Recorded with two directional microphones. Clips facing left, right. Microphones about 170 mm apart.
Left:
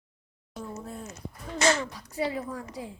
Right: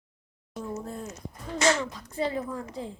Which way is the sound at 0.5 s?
5° left (ahead or behind).